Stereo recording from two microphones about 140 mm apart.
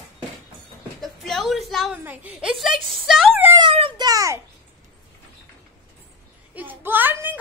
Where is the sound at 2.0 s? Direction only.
10° right (ahead or behind).